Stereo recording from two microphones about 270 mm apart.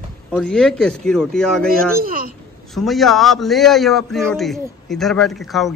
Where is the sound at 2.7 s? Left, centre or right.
Centre.